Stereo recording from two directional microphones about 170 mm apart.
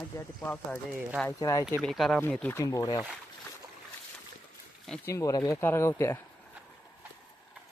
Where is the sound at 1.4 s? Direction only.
20° left (ahead or behind).